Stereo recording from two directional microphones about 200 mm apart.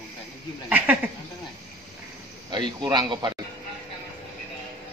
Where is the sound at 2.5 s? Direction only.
20° right (ahead or behind).